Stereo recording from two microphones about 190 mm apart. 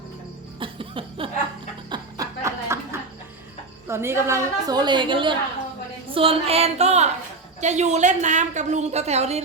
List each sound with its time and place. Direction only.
0.6 s chuckle: 30° right (ahead or behind)
1.9 s a sound: 15° right (ahead or behind)
3.8 s a woman's voice: 15° right (ahead or behind); by 9.4 s 35° right (ahead or behind)